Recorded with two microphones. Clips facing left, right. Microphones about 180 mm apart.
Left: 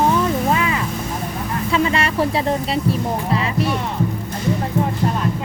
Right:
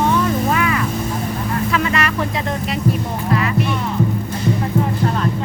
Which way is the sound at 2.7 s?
30° left (ahead or behind).